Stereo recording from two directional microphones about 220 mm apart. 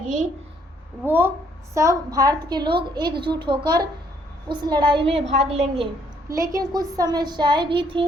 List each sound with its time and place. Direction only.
0.0 s a sound: 35° right (ahead or behind)
1.0 s a woman's voice: 10° right (ahead or behind); by 5.9 s 25° right (ahead or behind)
6.2 s a woman's voice: 15° right (ahead or behind)